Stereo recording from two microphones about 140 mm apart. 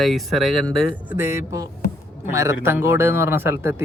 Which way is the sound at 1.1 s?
20° right (ahead or behind).